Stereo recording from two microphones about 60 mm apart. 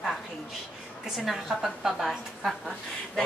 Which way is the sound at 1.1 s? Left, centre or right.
Centre.